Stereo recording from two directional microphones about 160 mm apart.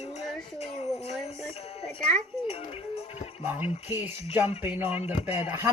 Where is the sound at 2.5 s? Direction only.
35° left (ahead or behind).